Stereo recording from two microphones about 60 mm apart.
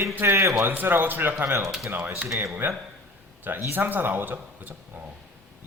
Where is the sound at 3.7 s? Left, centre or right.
Right.